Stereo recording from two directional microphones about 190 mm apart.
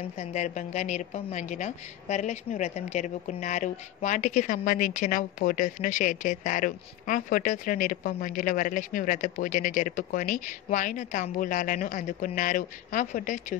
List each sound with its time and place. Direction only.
0.2 s a woman's voice: 40° left (ahead or behind)